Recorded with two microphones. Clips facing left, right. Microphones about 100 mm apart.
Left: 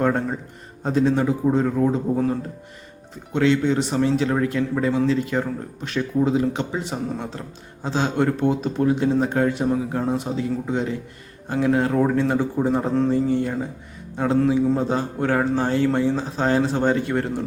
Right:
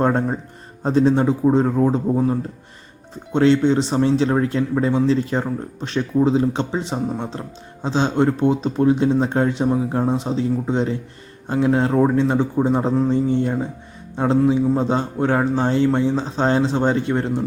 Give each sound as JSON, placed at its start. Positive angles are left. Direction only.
{"t": 0.0, "sound": "a man's voice", "side_deg": -30}
{"t": 3.3, "sound": "a man's voice", "side_deg": -30}